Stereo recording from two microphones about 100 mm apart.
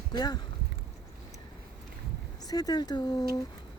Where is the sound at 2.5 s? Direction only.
40° left (ahead or behind).